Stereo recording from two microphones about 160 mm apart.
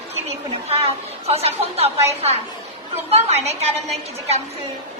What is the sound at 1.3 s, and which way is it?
A woman's voice, 40° right (ahead or behind).